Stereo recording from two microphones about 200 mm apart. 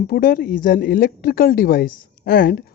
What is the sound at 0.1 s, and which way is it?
A woman's voice, 45° left (ahead or behind).